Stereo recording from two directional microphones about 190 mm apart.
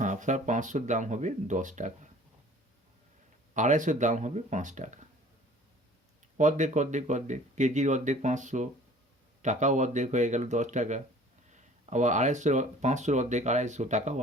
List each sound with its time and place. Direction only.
0.0 s speech: 40° right (ahead or behind)
3.5 s speech: 40° right (ahead or behind)
6.3 s speech: 40° right (ahead or behind)